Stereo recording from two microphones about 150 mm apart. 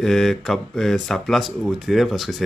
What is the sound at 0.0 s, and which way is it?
Speech, centre (ahead or behind).